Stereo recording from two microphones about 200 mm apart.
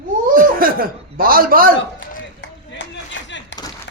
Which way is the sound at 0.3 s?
45° right (ahead or behind).